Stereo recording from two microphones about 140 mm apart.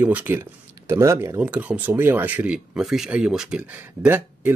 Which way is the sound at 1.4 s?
10° right (ahead or behind).